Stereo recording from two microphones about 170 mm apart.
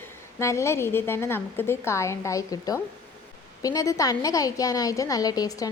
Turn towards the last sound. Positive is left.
turn(degrees=20)  # may be behind; listen again after turning